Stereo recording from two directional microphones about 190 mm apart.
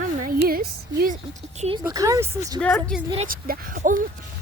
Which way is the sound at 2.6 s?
5° left (ahead or behind).